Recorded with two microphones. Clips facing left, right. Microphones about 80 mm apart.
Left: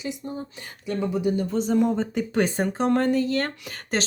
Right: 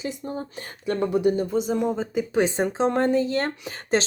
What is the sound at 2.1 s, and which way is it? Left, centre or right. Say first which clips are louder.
Speech: right 1 dB; centre.